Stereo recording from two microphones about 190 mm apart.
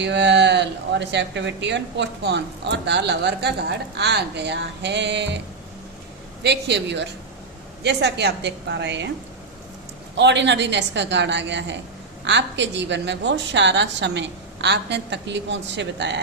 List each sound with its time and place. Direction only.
0.0 s speech: 65° right (ahead or behind)
6.4 s speech: 60° right (ahead or behind)
10.2 s a woman's voice: 65° right (ahead or behind)